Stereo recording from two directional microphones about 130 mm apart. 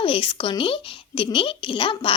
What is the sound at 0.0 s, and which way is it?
Speech, 40° left (ahead or behind).